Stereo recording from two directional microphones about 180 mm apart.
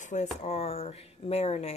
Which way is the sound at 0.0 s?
40° left (ahead or behind).